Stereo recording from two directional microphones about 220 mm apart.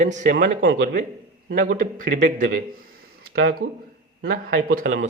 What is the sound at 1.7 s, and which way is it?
Speech, 35° right (ahead or behind).